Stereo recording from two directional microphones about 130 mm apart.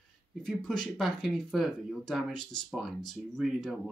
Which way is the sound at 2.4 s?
35° left (ahead or behind).